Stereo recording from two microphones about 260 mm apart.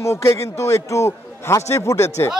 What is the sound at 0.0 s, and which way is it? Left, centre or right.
A man's voice, centre.